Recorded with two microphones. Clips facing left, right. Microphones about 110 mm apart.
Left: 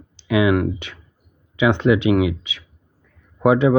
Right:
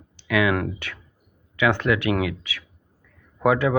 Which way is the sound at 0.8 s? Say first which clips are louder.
Even; 20° left (ahead or behind).